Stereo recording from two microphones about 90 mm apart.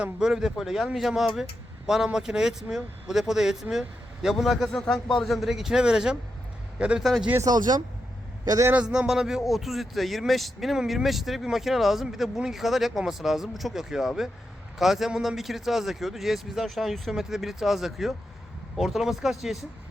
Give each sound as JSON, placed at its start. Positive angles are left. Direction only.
{"t": 0.0, "sound": "a man's voice", "side_deg": -10}
{"t": 7.0, "sound": "a man's voice", "side_deg": 0}
{"t": 7.4, "sound": "speech", "side_deg": -50}
{"t": 8.7, "sound": "a man's voice", "side_deg": -10}